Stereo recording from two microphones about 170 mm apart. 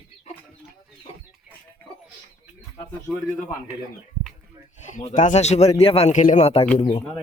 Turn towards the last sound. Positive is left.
turn(degrees=35)  # may be behind; listen again after turning